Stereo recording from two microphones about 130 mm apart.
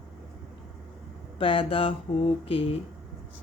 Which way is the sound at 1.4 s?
45° left (ahead or behind).